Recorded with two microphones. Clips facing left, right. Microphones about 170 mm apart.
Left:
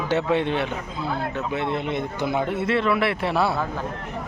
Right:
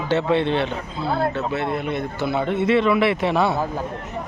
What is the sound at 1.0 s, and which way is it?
Speech, 35° right (ahead or behind).